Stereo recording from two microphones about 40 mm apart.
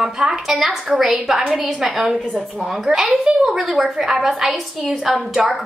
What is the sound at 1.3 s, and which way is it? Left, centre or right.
Speech, right.